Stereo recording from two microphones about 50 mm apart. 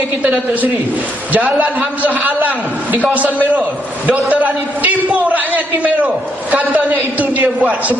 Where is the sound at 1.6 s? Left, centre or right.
Right.